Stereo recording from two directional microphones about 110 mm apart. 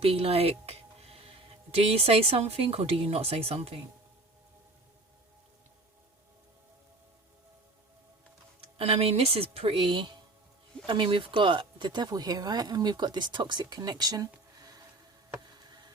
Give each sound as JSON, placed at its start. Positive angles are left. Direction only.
{"t": 0.0, "sound": "music", "side_deg": -65}
{"t": 1.7, "sound": "speech", "side_deg": -65}
{"t": 8.8, "sound": "speech", "side_deg": -65}
{"t": 15.6, "sound": "a sound", "side_deg": -40}